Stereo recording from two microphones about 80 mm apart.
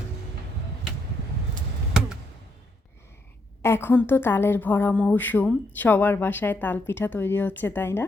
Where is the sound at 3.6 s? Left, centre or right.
Left.